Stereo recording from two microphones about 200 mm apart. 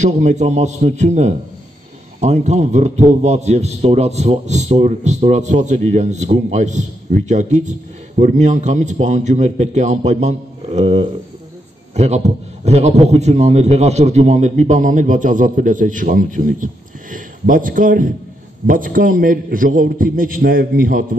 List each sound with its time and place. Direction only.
0.0 s a man's voice: 35° right (ahead or behind)